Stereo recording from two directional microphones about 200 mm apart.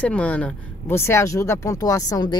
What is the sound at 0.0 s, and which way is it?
A woman's voice, 5° left (ahead or behind).